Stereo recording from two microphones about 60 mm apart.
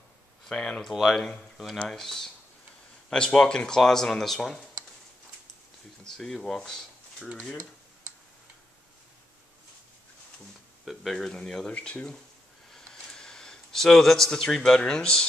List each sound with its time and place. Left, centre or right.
0.5 s speech: centre
6.0 s speech: centre
10.9 s speech: centre
11.7 s speech: left
12.7 s a sound: centre